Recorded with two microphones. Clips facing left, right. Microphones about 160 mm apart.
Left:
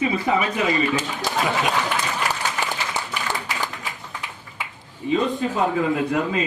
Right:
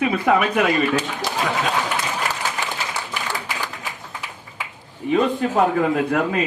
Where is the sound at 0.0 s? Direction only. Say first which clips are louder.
Right 3 dB; 60° right (ahead or behind).